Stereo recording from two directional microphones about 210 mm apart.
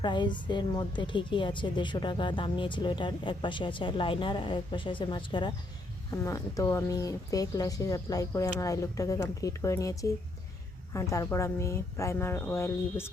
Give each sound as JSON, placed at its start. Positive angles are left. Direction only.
{"t": 0.0, "sound": "a woman's voice", "side_deg": 20}